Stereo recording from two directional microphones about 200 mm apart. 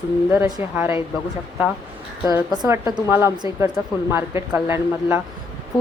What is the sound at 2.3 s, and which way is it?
Speech, 20° right (ahead or behind).